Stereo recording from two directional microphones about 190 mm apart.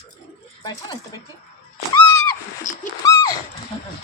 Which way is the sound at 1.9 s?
20° left (ahead or behind).